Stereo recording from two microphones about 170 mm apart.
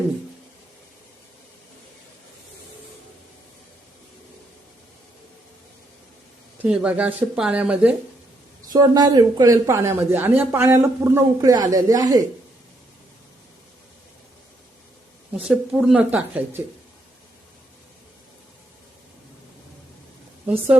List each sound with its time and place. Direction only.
6.6 s speech: 10° right (ahead or behind)
8.7 s speech: 25° right (ahead or behind)
15.3 s speech: 5° right (ahead or behind)